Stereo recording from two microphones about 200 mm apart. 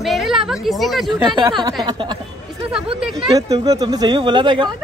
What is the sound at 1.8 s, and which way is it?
Speech, 20° right (ahead or behind).